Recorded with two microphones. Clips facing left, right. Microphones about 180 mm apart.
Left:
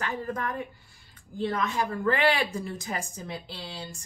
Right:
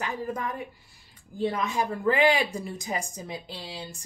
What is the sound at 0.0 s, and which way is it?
A woman's voice, 15° right (ahead or behind).